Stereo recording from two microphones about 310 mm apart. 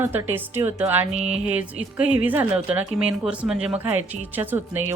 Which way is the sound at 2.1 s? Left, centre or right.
Centre.